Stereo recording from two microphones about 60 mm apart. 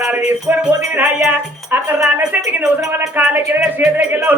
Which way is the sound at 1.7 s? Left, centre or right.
Right.